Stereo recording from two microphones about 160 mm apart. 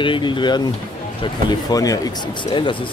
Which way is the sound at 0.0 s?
30° left (ahead or behind).